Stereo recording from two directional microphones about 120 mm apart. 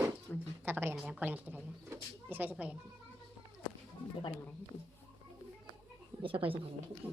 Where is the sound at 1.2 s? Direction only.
15° right (ahead or behind).